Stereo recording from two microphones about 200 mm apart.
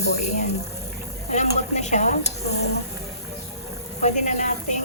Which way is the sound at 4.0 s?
35° left (ahead or behind).